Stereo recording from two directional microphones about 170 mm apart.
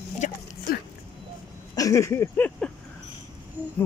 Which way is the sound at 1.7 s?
20° left (ahead or behind).